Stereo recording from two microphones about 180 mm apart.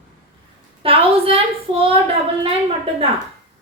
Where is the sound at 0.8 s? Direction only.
30° right (ahead or behind).